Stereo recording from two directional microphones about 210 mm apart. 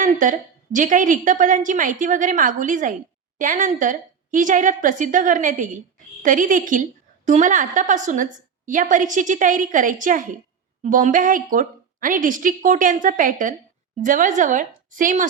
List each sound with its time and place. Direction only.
0.0 s a woman's voice: 40° right (ahead or behind)